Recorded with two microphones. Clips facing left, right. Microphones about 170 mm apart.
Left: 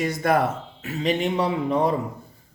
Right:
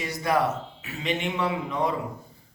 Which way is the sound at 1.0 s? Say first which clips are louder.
Left 5 dB; 40° left (ahead or behind).